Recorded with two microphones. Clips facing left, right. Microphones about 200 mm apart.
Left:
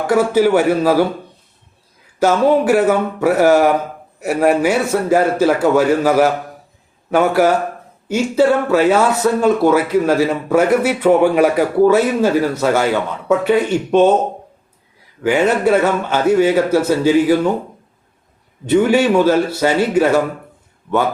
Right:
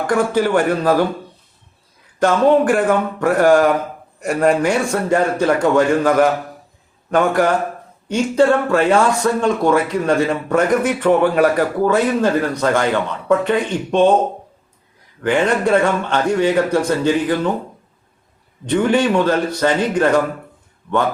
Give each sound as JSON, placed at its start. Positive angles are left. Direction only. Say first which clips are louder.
{"t": 0.1, "sound": "speech", "louder": "left 4 dB", "side_deg": 5}
{"t": 2.1, "sound": "a man's voice", "louder": "even", "side_deg": 5}
{"t": 15.2, "sound": "speech", "louder": "left 2 dB", "side_deg": 5}
{"t": 18.6, "sound": "speech", "louder": "left 3 dB", "side_deg": 5}